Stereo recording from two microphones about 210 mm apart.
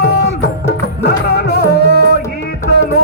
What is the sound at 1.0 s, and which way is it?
Music, 50° left (ahead or behind).